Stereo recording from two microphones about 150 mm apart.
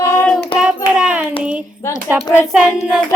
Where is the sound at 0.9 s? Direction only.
5° right (ahead or behind).